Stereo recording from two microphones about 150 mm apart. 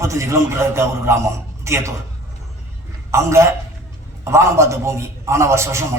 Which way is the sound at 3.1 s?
20° right (ahead or behind).